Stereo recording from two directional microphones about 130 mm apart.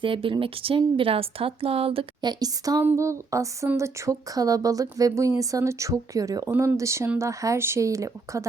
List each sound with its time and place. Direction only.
0.0 s speech: 40° right (ahead or behind)
2.4 s speech: 25° right (ahead or behind)